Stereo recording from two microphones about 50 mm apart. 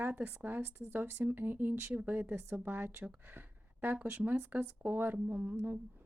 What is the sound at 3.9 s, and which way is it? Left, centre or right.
A woman's voice, right.